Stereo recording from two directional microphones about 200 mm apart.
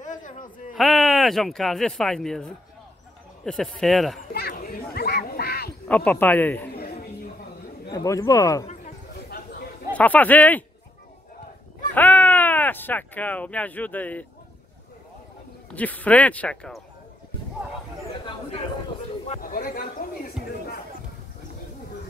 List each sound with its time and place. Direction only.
0.0 s a sound: 40° left (ahead or behind)
0.7 s speech: centre (ahead or behind)
4.3 s chatter: 50° left (ahead or behind)
4.9 s quack: 55° left (ahead or behind)
5.9 s speech: 5° left (ahead or behind)
6.7 s a sound: 50° left (ahead or behind)
7.9 s speech: 15° left (ahead or behind)
9.9 s speech: 10° left (ahead or behind)
11.9 s speech: 10° left (ahead or behind)
15.7 s speech: 10° left (ahead or behind)
19.2 s a sound: 45° left (ahead or behind)